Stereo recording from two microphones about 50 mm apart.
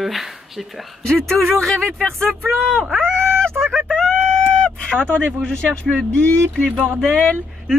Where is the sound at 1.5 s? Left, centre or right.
Centre.